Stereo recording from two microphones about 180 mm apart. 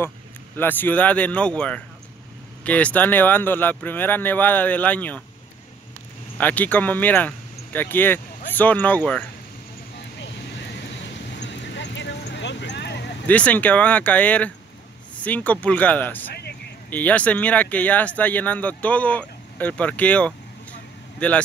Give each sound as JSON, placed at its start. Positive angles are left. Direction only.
{"t": 0.6, "sound": "speech", "side_deg": 10}
{"t": 6.3, "sound": "speech", "side_deg": 10}
{"t": 9.9, "sound": "vehicle", "side_deg": 75}
{"t": 11.3, "sound": "a sound", "side_deg": 75}
{"t": 13.3, "sound": "speech", "side_deg": 10}
{"t": 16.3, "sound": "vehicle", "side_deg": 65}
{"t": 16.9, "sound": "speech", "side_deg": 10}